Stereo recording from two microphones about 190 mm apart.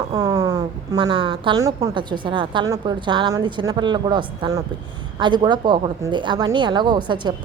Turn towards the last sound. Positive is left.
turn(degrees=-25)  # may be behind; listen again after turning